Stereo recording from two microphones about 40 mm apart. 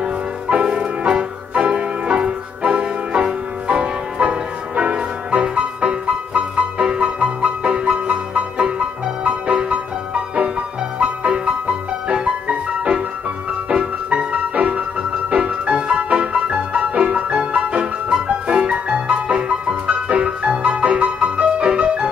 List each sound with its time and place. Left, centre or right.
0.0 s music: right